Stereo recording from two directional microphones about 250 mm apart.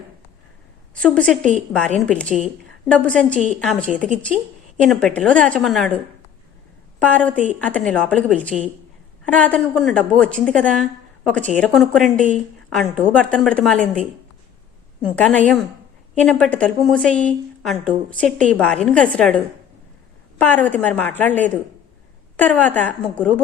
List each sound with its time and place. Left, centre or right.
0.9 s a woman's voice: centre
7.0 s a woman's voice: centre
15.0 s a woman's voice: centre
20.4 s a woman's voice: centre